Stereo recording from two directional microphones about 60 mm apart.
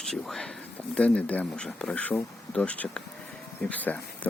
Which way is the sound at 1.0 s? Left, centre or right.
Left.